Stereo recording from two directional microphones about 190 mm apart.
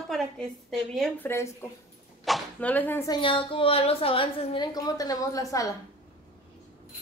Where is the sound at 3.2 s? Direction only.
30° left (ahead or behind).